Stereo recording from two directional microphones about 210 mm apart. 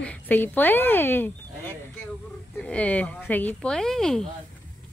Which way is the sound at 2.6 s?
5° left (ahead or behind).